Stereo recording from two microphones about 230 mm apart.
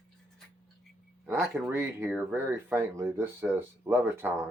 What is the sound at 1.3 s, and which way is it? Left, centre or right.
Speech, centre.